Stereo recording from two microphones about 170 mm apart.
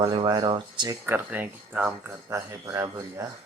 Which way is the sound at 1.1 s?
10° right (ahead or behind).